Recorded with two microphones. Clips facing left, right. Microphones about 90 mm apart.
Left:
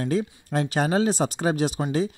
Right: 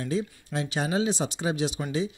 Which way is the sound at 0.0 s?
50° left (ahead or behind).